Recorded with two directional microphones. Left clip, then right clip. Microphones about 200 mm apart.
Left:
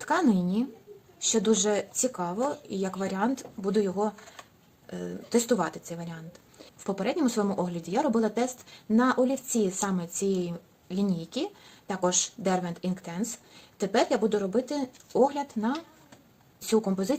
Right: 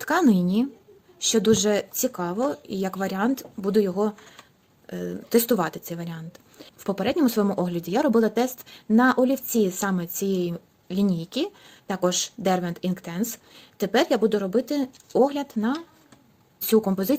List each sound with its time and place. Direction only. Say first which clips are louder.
0.0 s speech: right 4 dB; 45° right (ahead or behind)